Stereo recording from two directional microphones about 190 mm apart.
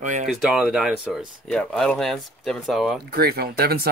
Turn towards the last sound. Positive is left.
turn(degrees=-55)  # may be behind; listen again after turning